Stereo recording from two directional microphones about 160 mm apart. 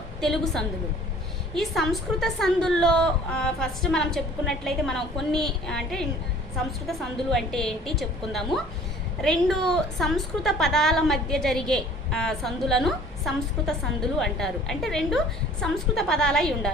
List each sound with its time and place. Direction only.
0.2 s a woman's voice: centre (ahead or behind)